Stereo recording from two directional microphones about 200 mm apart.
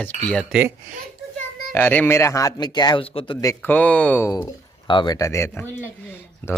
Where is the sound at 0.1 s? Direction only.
40° right (ahead or behind).